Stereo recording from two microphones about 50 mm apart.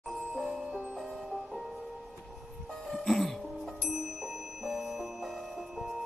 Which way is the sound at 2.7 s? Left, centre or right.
Centre.